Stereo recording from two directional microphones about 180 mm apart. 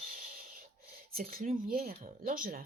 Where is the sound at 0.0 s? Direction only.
50° right (ahead or behind).